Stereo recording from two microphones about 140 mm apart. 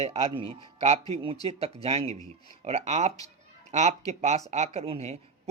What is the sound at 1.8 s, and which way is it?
Speech, 50° right (ahead or behind).